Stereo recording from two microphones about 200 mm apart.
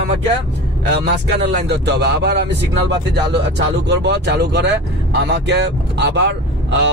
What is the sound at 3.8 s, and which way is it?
Speech, 60° right (ahead or behind).